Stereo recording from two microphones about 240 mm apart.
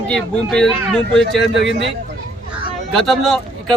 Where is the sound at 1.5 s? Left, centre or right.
Right.